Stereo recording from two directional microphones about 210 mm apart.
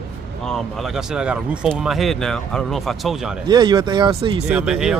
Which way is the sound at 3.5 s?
20° right (ahead or behind).